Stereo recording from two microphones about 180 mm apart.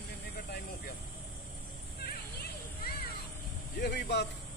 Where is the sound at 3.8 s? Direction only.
70° left (ahead or behind).